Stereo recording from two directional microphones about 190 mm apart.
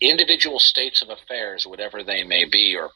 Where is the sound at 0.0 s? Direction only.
45° right (ahead or behind).